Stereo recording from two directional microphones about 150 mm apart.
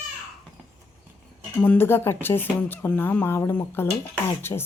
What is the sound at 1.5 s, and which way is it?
Speech, 15° left (ahead or behind).